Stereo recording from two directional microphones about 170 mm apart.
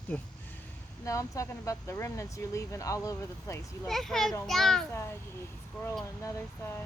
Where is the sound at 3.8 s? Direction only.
Centre (ahead or behind).